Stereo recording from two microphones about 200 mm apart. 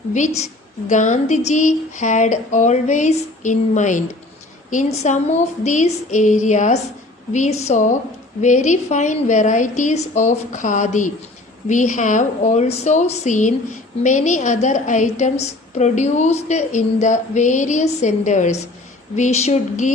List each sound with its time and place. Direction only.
0.1 s a woman's voice: 35° left (ahead or behind)